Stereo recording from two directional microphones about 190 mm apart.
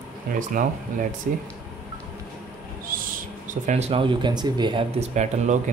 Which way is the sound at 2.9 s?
50° right (ahead or behind).